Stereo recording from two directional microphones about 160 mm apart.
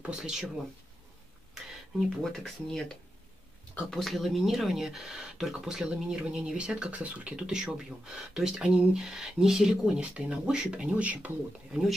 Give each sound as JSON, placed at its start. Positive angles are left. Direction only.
{"t": 0.0, "sound": "speech", "side_deg": -5}
{"t": 2.0, "sound": "speech", "side_deg": 5}